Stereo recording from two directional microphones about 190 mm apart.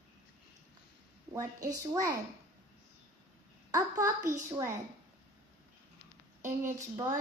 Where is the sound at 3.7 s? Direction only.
15° right (ahead or behind).